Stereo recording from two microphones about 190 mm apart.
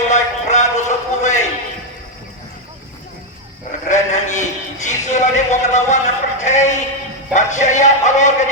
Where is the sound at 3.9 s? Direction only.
40° left (ahead or behind).